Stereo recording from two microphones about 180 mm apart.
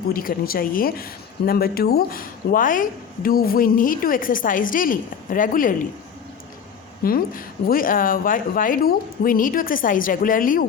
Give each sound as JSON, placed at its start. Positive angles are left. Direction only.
{"t": 0.1, "sound": "a woman's voice", "side_deg": 55}
{"t": 7.0, "sound": "speech", "side_deg": 55}